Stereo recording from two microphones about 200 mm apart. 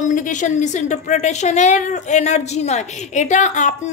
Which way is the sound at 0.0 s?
40° left (ahead or behind).